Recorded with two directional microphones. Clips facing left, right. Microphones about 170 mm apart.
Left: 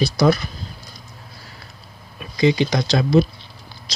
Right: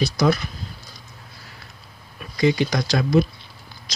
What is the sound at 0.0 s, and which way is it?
Speech, 30° left (ahead or behind).